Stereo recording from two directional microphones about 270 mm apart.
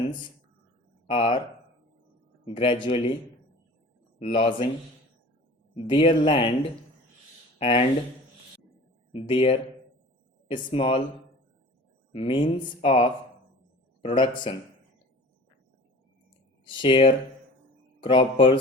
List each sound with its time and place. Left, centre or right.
1.1 s speech: centre
2.4 s speech: centre
4.4 s speech: centre
5.7 s speech: centre
7.6 s speech: left
9.1 s speech: centre
12.1 s speech: centre
16.6 s speech: centre